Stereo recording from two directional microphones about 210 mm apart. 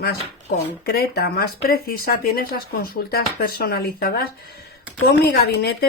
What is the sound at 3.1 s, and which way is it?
Speech, 45° left (ahead or behind).